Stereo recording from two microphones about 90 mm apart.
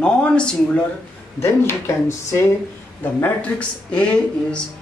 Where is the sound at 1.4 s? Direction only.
30° left (ahead or behind).